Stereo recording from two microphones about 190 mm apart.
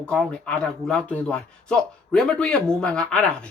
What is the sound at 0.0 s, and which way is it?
Speech, 5° left (ahead or behind).